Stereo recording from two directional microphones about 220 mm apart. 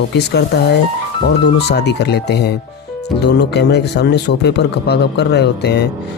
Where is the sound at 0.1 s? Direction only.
50° left (ahead or behind).